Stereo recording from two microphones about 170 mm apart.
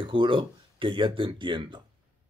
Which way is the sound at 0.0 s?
30° right (ahead or behind).